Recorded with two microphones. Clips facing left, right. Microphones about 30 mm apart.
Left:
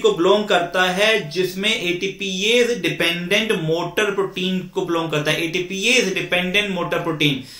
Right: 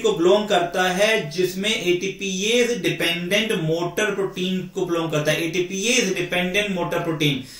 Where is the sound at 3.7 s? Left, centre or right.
Left.